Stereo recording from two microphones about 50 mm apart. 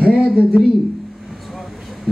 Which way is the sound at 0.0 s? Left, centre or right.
Right.